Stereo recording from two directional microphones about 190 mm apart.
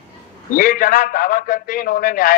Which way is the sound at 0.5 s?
45° left (ahead or behind).